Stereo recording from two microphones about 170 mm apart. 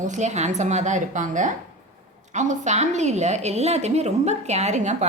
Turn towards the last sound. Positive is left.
turn(degrees=-40)  # may be behind; listen again after turning